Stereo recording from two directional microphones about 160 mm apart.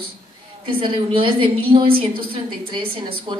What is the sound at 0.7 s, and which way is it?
Speech, 30° right (ahead or behind).